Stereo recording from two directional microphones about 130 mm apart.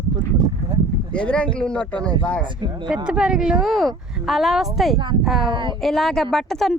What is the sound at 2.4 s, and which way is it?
Speech, 35° right (ahead or behind).